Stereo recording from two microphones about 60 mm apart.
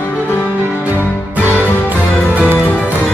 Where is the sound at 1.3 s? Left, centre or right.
Right.